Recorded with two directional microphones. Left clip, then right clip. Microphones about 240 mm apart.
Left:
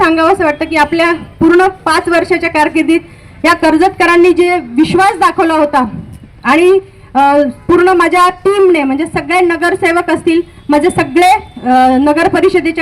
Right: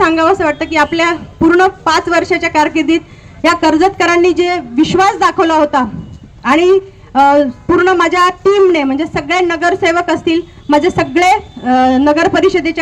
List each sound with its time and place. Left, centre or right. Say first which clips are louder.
0.0 s a woman's voice: left 1 dB; left